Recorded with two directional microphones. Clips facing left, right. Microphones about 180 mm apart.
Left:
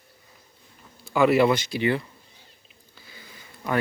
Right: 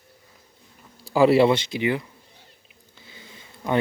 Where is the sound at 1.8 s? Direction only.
15° right (ahead or behind).